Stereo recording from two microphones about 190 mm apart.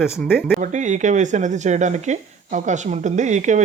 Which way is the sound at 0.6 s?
40° right (ahead or behind).